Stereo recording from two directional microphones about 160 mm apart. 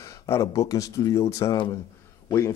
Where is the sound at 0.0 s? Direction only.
20° left (ahead or behind).